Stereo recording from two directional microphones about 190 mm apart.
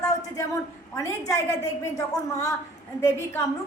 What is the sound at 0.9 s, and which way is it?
A woman's voice, 15° left (ahead or behind).